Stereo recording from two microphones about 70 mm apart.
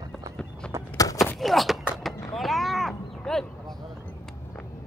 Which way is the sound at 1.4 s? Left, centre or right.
Centre.